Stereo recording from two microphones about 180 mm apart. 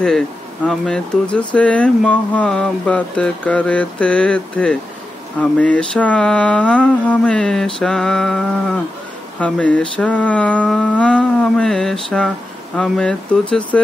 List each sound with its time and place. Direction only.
0.7 s mantra: 5° left (ahead or behind)
1.5 s speech: 5° left (ahead or behind)
5.4 s mantra: 5° left (ahead or behind)
9.4 s speech: 5° left (ahead or behind)
12.7 s mantra: 5° left (ahead or behind)